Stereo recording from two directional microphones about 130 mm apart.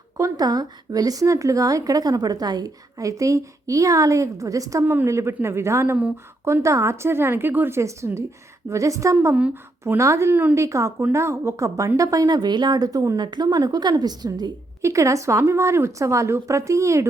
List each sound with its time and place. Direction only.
0.2 s a woman's voice: 30° right (ahead or behind)
9.1 s a woman's voice: 10° right (ahead or behind)